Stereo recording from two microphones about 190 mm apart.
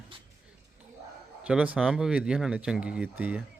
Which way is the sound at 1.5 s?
5° right (ahead or behind).